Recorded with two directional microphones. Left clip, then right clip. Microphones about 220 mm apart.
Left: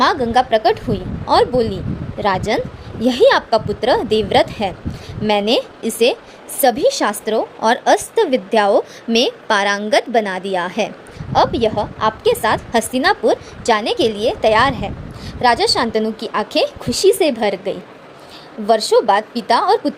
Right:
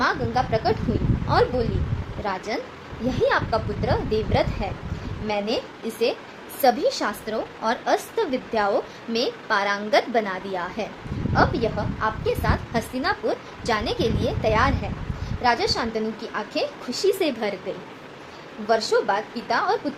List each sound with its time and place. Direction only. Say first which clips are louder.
0.0 s a woman's voice: left 9 dB; 40° left (ahead or behind)
18.9 s a woman's voice: left 9 dB; 40° left (ahead or behind)